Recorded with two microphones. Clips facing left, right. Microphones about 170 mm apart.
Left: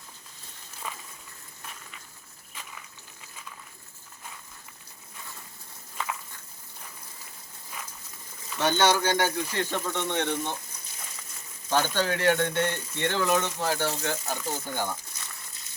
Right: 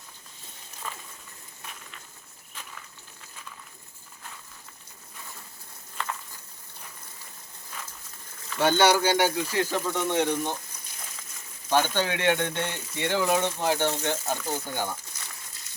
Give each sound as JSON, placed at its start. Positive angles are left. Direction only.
{"t": 0.8, "sound": "a sound", "side_deg": 10}
{"t": 8.5, "sound": "speech", "side_deg": -10}
{"t": 11.7, "sound": "speech", "side_deg": -15}